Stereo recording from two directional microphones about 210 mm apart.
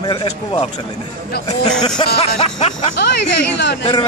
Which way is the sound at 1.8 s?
25° left (ahead or behind).